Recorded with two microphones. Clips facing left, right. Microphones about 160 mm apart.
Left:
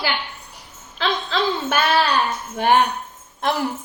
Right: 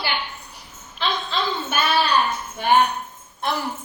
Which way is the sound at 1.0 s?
90° left.